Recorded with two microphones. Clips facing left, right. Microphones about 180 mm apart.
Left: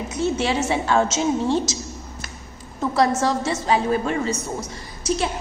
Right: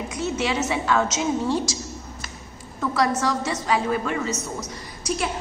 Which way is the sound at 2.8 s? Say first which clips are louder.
Left 3 dB; 25° left (ahead or behind).